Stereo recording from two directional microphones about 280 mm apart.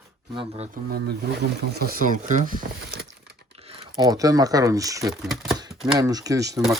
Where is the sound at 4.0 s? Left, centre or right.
Centre.